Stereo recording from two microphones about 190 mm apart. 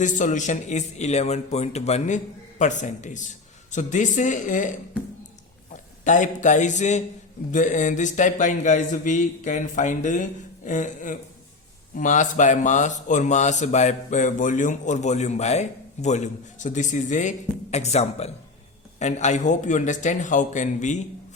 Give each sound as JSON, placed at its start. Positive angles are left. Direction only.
{"t": 0.0, "sound": "speech", "side_deg": 40}
{"t": 5.7, "sound": "a man's voice", "side_deg": 40}